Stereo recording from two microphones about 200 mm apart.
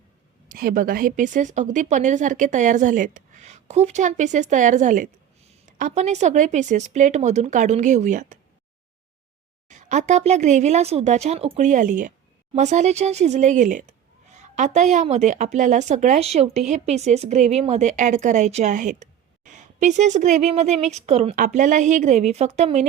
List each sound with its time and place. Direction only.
0.4 s a woman's voice: 45° right (ahead or behind)
9.6 s a woman's voice: 35° right (ahead or behind)